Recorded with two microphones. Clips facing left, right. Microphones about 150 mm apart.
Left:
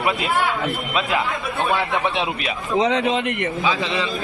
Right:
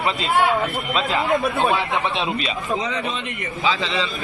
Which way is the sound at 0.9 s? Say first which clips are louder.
Right 1 dB; 10° left (ahead or behind).